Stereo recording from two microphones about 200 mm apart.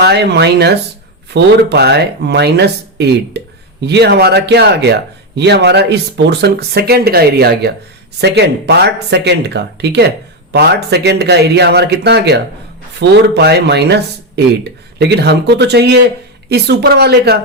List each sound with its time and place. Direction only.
0.0 s speech: 55° right (ahead or behind)